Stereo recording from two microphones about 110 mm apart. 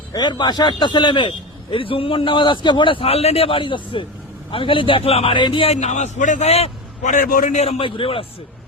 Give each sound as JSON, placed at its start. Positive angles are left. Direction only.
{"t": 0.1, "sound": "a man's voice", "side_deg": 40}
{"t": 5.6, "sound": "a man's voice", "side_deg": 85}
{"t": 7.8, "sound": "a man's voice", "side_deg": 55}